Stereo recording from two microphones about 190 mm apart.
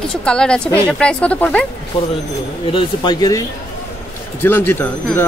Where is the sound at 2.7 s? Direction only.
25° left (ahead or behind).